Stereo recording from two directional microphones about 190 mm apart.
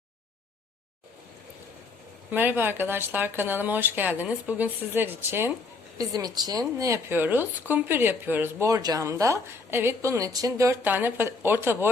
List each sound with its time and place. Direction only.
2.3 s speech: 10° right (ahead or behind)